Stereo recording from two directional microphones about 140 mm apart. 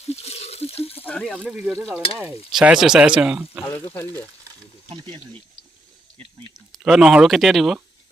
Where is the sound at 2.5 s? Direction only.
5° right (ahead or behind).